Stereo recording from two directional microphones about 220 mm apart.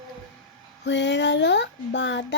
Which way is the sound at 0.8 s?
55° left (ahead or behind).